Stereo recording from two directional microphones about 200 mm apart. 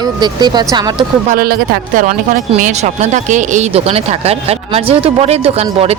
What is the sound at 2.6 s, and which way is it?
Speech, 40° right (ahead or behind).